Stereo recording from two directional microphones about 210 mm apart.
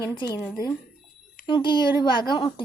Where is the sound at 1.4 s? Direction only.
20° left (ahead or behind).